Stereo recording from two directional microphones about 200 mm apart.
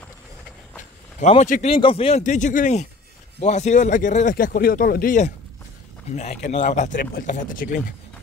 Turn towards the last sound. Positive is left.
turn(degrees=40)  # may be behind; listen again after turning